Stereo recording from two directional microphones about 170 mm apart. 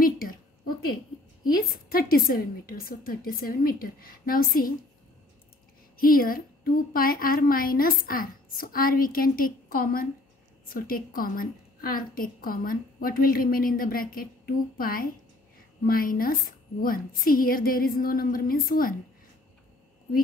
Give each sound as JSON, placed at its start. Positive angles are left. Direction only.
{"t": 0.0, "sound": "a sound", "side_deg": 60}
{"t": 1.5, "sound": "a woman's voice", "side_deg": 60}
{"t": 5.9, "sound": "a woman's voice", "side_deg": 60}